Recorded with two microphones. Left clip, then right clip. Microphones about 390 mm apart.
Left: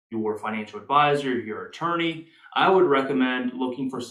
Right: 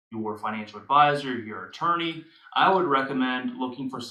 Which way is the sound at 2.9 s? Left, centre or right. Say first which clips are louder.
Left 2 dB; centre.